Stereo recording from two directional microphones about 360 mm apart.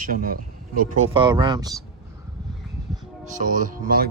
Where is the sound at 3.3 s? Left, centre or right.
Right.